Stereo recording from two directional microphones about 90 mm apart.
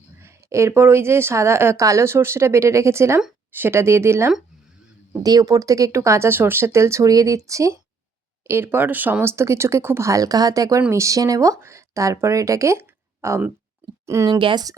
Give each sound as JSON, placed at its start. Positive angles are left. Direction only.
{"t": 0.2, "sound": "a woman's voice", "side_deg": -30}
{"t": 5.2, "sound": "a woman's voice", "side_deg": -45}
{"t": 14.3, "sound": "speech", "side_deg": -60}